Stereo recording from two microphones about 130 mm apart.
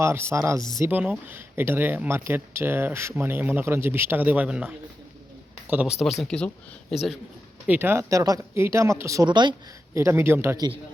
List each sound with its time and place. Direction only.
0.0 s speech: 20° right (ahead or behind); by 6.5 s 5° left (ahead or behind)
7.7 s speech: 15° right (ahead or behind); by 9.6 s 35° right (ahead or behind)
9.9 s speech: 20° right (ahead or behind)